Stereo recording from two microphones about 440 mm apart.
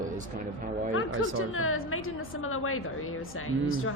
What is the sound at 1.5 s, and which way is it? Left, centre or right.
A woman's voice, left.